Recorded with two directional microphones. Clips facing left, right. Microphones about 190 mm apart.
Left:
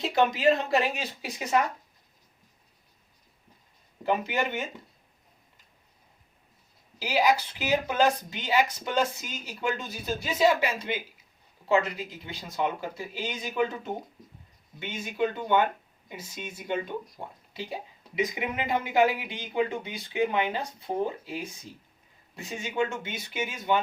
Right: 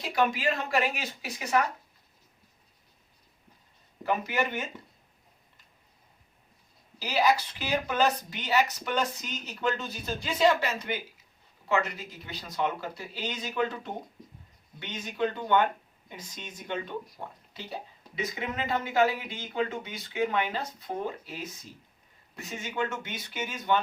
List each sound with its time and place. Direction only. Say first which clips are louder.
0.0 s a sound: left 3 dB; 25° left (ahead or behind)
0.3 s speech: left 5 dB; 25° left (ahead or behind)
4.0 s speech: left 1 dB; 15° left (ahead or behind)
7.0 s speech: left 1 dB; 10° left (ahead or behind)
11.7 s speech: left 4 dB; 30° left (ahead or behind)
12.4 s speech: left 1 dB; 15° left (ahead or behind)